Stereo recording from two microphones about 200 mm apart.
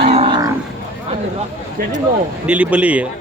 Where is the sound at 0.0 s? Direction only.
30° right (ahead or behind).